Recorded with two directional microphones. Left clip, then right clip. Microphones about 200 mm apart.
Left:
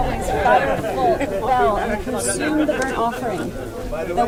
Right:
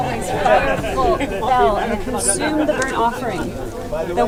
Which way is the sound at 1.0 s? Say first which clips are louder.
Even; centre (ahead or behind).